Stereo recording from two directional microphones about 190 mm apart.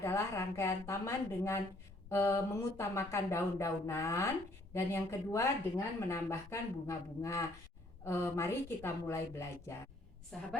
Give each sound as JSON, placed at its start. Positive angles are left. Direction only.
{"t": 0.0, "sound": "speech", "side_deg": 15}
{"t": 10.3, "sound": "a woman's voice", "side_deg": 0}